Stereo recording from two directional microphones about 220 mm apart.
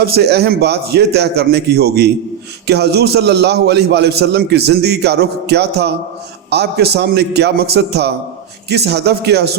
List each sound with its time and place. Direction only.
0.0 s a man's voice: 45° right (ahead or behind)